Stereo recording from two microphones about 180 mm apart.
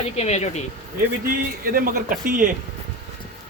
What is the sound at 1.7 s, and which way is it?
Speech, 55° right (ahead or behind).